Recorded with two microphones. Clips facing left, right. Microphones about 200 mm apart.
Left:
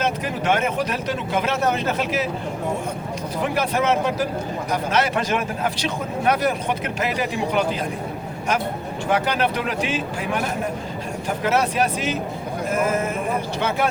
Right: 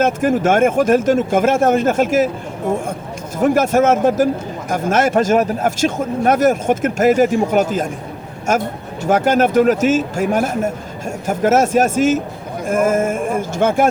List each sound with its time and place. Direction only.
0.0 s a man's voice: 50° right (ahead or behind)
3.3 s a man's voice: 45° right (ahead or behind)
9.0 s a man's voice: 45° right (ahead or behind)